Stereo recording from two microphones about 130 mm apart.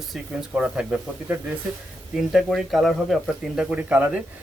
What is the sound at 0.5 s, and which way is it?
A man's voice, 10° right (ahead or behind).